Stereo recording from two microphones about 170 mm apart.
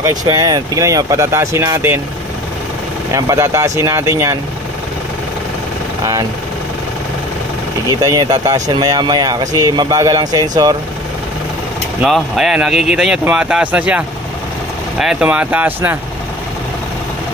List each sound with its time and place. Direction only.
0.0 s speech: 20° right (ahead or behind)
3.1 s speech: 20° right (ahead or behind)
7.9 s speech: 20° right (ahead or behind)
12.0 s speech: 5° right (ahead or behind)